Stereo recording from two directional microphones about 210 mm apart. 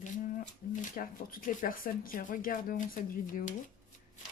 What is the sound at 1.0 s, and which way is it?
Speech, 40° left (ahead or behind).